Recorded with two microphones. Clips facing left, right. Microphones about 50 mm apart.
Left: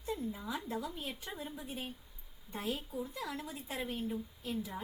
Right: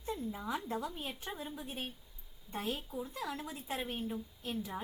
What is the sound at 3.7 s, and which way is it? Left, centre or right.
Speech, right.